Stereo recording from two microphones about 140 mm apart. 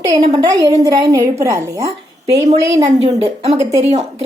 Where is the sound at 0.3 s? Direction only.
25° right (ahead or behind).